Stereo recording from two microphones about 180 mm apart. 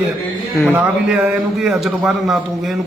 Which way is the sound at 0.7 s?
5° right (ahead or behind).